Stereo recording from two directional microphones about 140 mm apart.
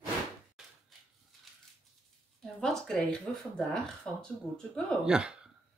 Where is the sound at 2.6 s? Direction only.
5° left (ahead or behind).